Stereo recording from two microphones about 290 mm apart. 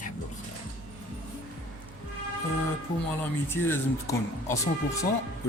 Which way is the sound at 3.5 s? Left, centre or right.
Centre.